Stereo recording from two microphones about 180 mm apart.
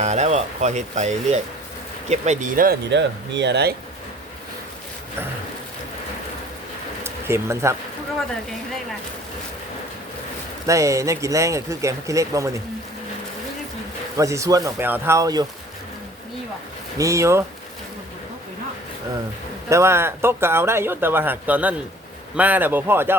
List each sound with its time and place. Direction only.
0.0 s speech: 40° right (ahead or behind)
2.9 s speech: 75° right (ahead or behind)
7.0 s a sound: 15° right (ahead or behind)
10.7 s speech: 15° right (ahead or behind)
14.2 s speech: 15° right (ahead or behind)
17.0 s speech: 15° right (ahead or behind)
19.7 s speech: 15° right (ahead or behind)